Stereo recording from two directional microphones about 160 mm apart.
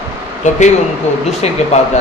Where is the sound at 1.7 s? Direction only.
45° left (ahead or behind).